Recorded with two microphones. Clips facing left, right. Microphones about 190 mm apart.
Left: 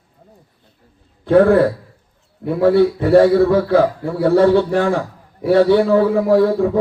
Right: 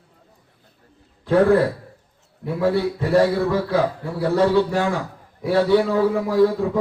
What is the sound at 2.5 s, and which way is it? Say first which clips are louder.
A man's voice: left 7 dB; 55° left (ahead or behind).